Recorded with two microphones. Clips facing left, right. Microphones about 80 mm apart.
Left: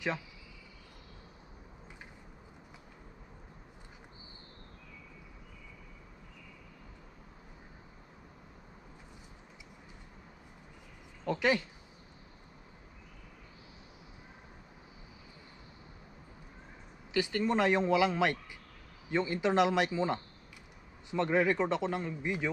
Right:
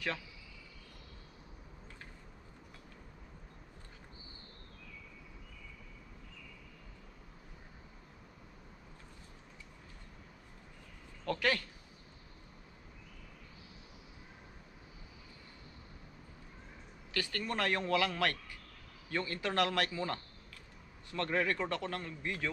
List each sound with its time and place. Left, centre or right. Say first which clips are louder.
11.2 s speech: left 4 dB; centre
17.1 s a man's voice: left 8 dB; centre